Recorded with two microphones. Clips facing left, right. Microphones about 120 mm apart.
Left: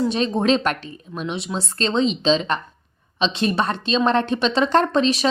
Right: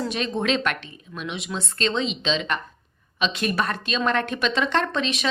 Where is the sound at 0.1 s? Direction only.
35° left (ahead or behind).